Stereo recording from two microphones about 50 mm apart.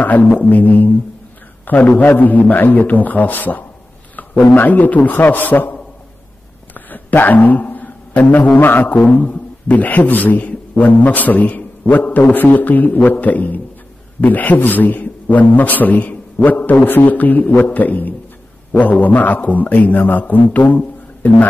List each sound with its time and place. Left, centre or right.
0.0 s a man's voice: left
6.7 s a sound: left
8.5 s a man's voice: left